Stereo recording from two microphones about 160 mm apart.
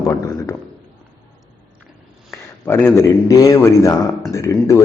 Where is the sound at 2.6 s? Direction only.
15° left (ahead or behind).